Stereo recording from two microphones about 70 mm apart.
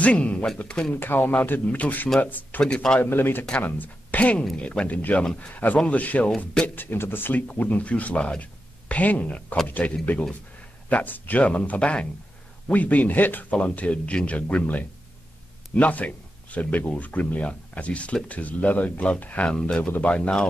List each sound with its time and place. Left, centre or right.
0.0 s speech: centre
0.9 s speech: left
2.6 s speech: centre
3.0 s speech: left; by 5.5 s centre
5.5 s speech: left
6.2 s speech: centre
6.7 s speech: left; by 20.4 s centre